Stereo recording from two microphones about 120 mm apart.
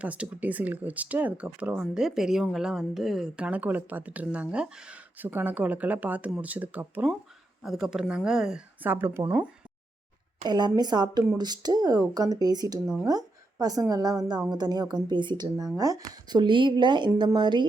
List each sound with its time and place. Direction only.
0.0 s speech: 10° right (ahead or behind)
8.9 s speech: 20° right (ahead or behind)
10.4 s speech: 35° right (ahead or behind)
12.8 s speech: 5° right (ahead or behind)
13.1 s a woman's voice: 30° right (ahead or behind)